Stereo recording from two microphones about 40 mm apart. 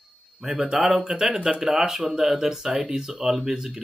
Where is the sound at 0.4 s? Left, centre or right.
Centre.